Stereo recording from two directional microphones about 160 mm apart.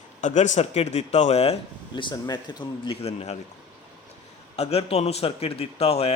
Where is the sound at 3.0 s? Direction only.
40° left (ahead or behind).